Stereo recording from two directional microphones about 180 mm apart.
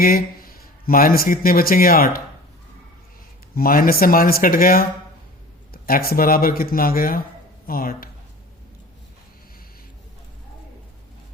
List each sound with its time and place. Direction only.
0.0 s speech: 55° left (ahead or behind)
3.5 s speech: 55° left (ahead or behind)